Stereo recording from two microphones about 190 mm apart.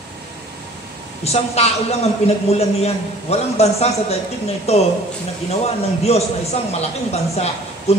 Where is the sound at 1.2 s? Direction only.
35° left (ahead or behind).